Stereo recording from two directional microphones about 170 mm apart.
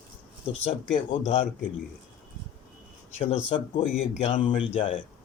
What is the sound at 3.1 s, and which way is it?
Speech, 40° left (ahead or behind).